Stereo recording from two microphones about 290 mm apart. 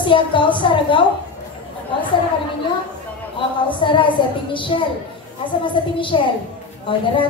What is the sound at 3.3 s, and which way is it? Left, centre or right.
A woman's voice, centre.